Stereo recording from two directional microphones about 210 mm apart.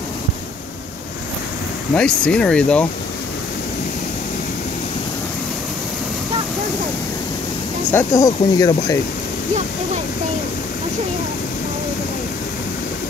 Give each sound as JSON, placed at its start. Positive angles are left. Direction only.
{"t": 2.0, "sound": "speech", "side_deg": 5}
{"t": 7.9, "sound": "speech", "side_deg": 15}